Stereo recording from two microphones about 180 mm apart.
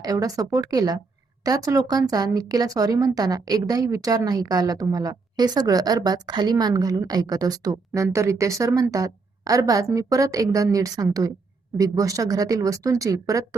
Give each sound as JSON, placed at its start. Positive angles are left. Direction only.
{"t": 0.0, "sound": "speech", "side_deg": -20}